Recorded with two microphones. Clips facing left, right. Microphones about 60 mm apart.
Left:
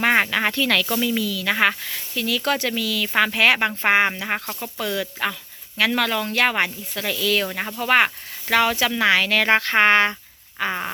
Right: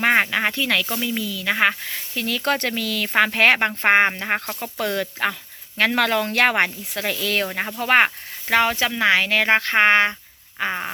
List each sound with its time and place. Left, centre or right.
0.0 s speech: centre; by 3.1 s right
3.1 s speech: right
4.6 s speech: right
10.6 s fart: centre